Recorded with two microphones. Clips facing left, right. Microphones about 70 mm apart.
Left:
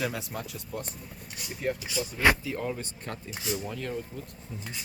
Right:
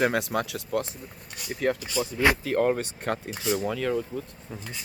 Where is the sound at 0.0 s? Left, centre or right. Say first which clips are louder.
Right 8 dB; right.